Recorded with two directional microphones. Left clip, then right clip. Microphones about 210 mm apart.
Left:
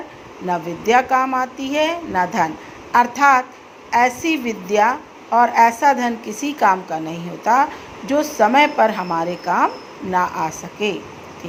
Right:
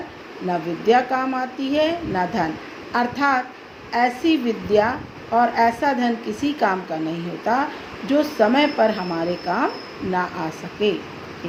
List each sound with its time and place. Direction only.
0.5 s a woman's voice: 20° left (ahead or behind)